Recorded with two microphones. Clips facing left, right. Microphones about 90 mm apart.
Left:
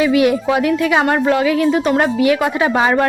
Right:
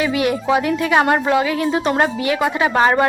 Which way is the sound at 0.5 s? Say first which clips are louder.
Left 1 dB; 10° right (ahead or behind).